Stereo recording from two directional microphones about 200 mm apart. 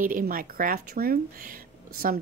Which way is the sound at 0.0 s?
45° right (ahead or behind).